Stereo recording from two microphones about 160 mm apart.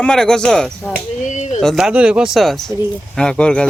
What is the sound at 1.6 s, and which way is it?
Speech, centre (ahead or behind).